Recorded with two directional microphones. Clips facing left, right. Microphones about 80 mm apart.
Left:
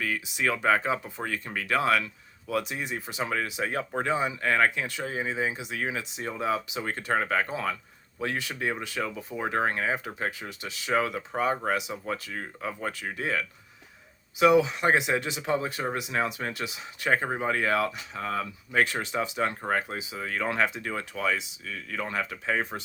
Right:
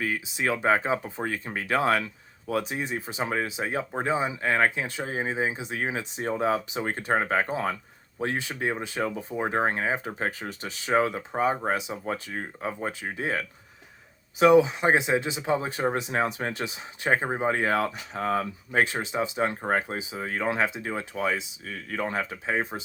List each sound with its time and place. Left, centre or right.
0.0 s speech: right
18.8 s speech: right
21.6 s speech: right
22.4 s speech: centre